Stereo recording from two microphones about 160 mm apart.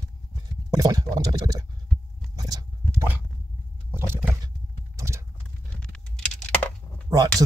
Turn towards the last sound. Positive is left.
turn(degrees=-20)  # may be behind; listen again after turning